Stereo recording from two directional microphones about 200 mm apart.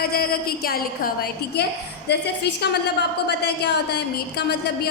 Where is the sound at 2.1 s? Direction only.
55° left (ahead or behind).